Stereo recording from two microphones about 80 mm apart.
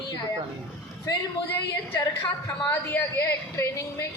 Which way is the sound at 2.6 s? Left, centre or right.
Left.